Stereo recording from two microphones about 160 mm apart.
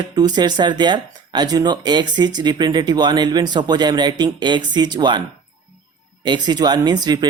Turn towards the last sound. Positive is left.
turn(degrees=-25)  # may be behind; listen again after turning